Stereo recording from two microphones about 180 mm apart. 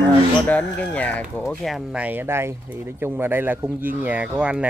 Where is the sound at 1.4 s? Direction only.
Centre (ahead or behind).